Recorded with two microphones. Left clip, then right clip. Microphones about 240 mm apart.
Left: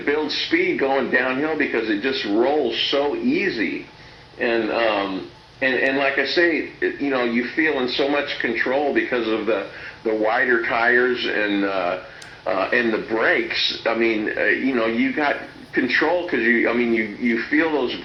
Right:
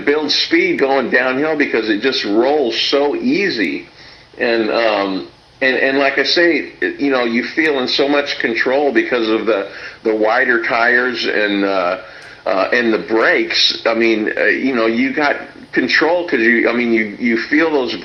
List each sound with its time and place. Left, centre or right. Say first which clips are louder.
0.0 s speech: right 7 dB; right